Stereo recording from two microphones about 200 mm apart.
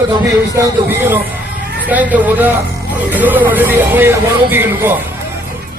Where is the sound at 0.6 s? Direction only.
10° right (ahead or behind).